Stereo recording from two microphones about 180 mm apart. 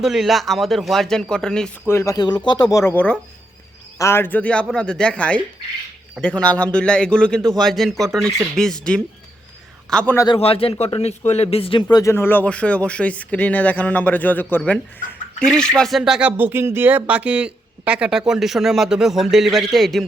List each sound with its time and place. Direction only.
0.0 s speech: centre (ahead or behind)
2.0 s a man's voice: 20° left (ahead or behind)
10.2 s a man's voice: 30° left (ahead or behind); by 20.1 s centre (ahead or behind)